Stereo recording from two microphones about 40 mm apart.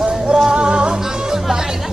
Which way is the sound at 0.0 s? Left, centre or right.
Right.